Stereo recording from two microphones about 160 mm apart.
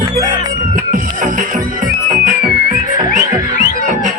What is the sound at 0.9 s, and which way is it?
Music, 60° right (ahead or behind).